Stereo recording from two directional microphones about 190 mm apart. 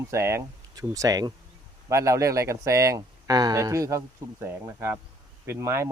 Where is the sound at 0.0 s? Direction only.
15° right (ahead or behind).